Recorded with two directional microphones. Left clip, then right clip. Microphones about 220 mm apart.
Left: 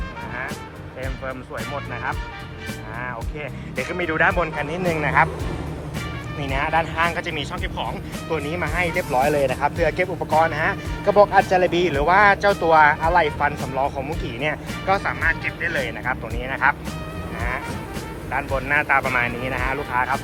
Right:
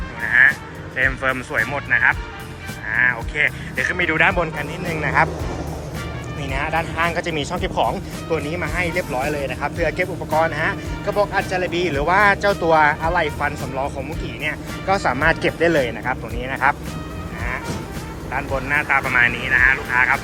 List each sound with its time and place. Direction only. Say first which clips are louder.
1.2 s speech: right 10 dB; 10° right (ahead or behind)
3.3 s speech: right 9 dB; 5° left (ahead or behind)
6.4 s speech: left 1 dB; 5° right (ahead or behind)
15.6 s speech: right 7 dB; 20° right (ahead or behind)
16.0 s speech: right 1 dB; 10° right (ahead or behind)
18.3 s speech: even; 5° right (ahead or behind)
19.5 s speech: right 8 dB; 15° left (ahead or behind)